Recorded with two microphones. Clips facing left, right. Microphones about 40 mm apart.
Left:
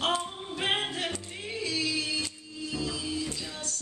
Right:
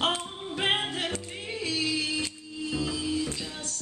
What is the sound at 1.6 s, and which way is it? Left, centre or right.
Music, right.